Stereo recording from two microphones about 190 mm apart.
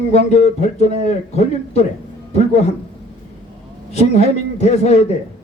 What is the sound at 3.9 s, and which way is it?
Speech, 35° left (ahead or behind).